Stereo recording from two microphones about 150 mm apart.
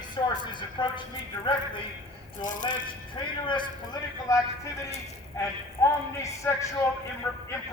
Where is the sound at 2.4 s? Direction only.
60° left (ahead or behind).